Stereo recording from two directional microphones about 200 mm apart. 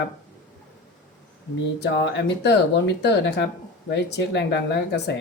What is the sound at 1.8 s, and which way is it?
Speech, 60° left (ahead or behind).